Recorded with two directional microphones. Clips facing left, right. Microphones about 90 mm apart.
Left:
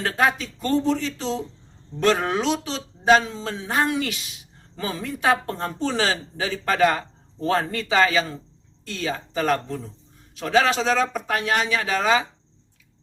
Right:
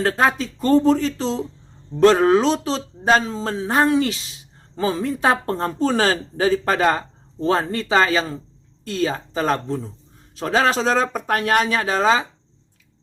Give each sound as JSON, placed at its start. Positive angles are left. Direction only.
{"t": 0.0, "sound": "speech", "side_deg": -35}